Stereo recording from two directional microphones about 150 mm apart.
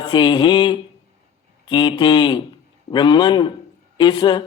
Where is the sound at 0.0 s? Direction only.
30° left (ahead or behind).